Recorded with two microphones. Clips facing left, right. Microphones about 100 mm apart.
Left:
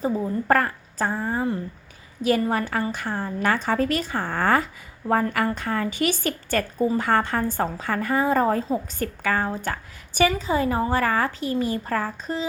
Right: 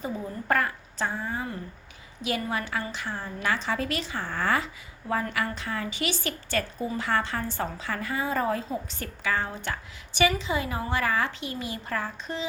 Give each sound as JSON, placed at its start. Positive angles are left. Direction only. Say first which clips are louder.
{"t": 0.0, "sound": "a woman's voice", "louder": "left 8 dB", "side_deg": 40}